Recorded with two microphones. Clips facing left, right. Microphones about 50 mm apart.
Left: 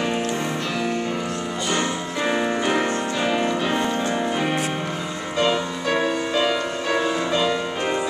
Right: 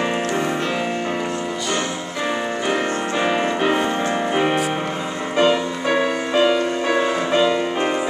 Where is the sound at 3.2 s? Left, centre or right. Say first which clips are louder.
Right 3 dB; centre.